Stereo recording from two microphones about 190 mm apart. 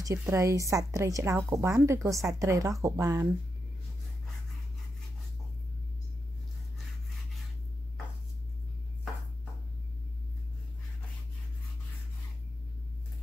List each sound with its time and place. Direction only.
0.0 s a woman's voice: 15° right (ahead or behind)